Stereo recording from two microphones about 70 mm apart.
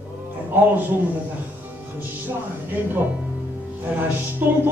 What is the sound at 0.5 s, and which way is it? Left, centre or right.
Speech, right.